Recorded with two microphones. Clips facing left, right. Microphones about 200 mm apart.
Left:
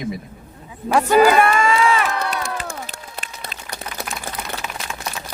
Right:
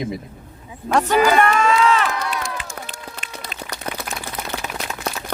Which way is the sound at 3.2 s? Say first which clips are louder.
Left 4 dB; 60° left (ahead or behind).